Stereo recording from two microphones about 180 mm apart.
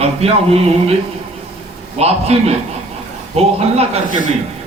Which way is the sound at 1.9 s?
35° right (ahead or behind).